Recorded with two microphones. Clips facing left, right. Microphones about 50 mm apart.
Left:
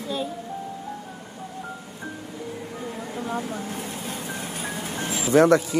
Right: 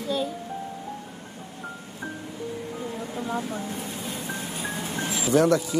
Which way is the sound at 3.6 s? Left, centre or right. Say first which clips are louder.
Left 1 dB; left.